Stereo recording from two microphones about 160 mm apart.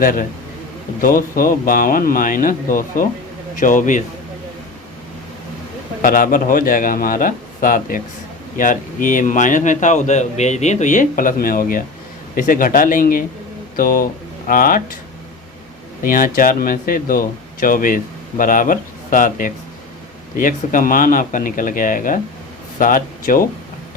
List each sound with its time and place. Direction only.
0.0 s speech: 60° left (ahead or behind)
6.0 s a man's voice: 60° left (ahead or behind)
16.0 s speech: 60° left (ahead or behind)